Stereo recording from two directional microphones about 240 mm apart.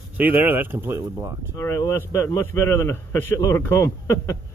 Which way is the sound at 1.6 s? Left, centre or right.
Centre.